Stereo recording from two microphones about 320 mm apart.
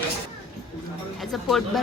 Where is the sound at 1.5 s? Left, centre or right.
Centre.